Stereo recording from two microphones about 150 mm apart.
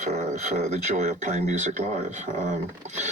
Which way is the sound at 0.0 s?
45° right (ahead or behind).